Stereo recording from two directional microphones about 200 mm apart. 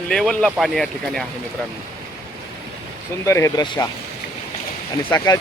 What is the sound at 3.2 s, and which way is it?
Speech, 15° left (ahead or behind).